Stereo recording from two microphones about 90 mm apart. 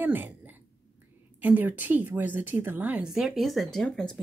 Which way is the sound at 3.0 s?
5° right (ahead or behind).